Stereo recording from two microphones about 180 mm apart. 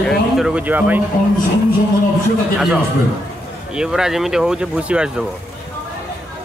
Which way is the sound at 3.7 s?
5° right (ahead or behind).